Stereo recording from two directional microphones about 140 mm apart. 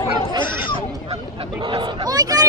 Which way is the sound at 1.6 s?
35° right (ahead or behind).